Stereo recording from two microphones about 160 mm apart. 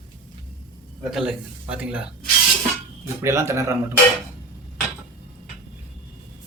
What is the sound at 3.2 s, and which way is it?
Speech, 20° right (ahead or behind).